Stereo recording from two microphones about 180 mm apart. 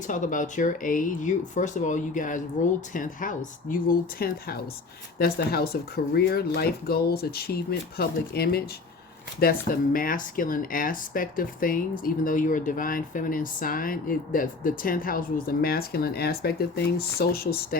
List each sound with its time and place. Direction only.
0.1 s speech: 45° left (ahead or behind)